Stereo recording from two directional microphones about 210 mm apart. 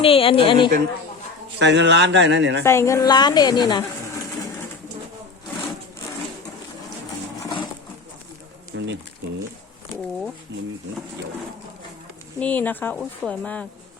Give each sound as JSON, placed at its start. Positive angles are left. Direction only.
{"t": 0.0, "sound": "a woman's voice", "side_deg": 25}
{"t": 1.5, "sound": "a man's voice", "side_deg": -55}
{"t": 2.6, "sound": "a woman's voice", "side_deg": 15}
{"t": 8.7, "sound": "a sound", "side_deg": -65}
{"t": 10.5, "sound": "a man's voice", "side_deg": -60}
{"t": 12.4, "sound": "speech", "side_deg": 10}